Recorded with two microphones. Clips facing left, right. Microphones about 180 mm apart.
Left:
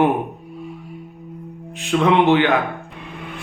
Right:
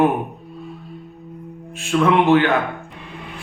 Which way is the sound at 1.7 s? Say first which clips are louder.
Even; 20° left (ahead or behind).